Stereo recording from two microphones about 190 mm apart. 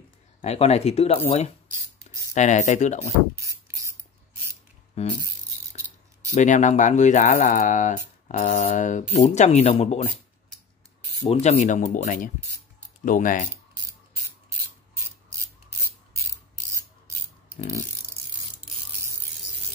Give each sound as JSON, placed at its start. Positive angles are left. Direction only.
{"t": 0.4, "sound": "speech", "side_deg": 35}
{"t": 2.3, "sound": "speech", "side_deg": 40}
{"t": 3.3, "sound": "music", "side_deg": -15}
{"t": 5.0, "sound": "speech", "side_deg": 35}
{"t": 6.3, "sound": "speech", "side_deg": 40}
{"t": 11.2, "sound": "speech", "side_deg": 40}